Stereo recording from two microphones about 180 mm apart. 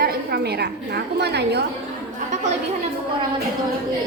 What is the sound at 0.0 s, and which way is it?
A woman's voice, 60° right (ahead or behind).